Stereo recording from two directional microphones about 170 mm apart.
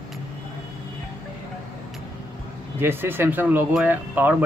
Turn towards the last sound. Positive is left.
turn(degrees=-10)  # may be behind; listen again after turning